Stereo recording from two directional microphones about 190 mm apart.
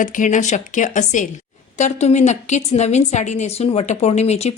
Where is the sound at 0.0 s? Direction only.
45° left (ahead or behind).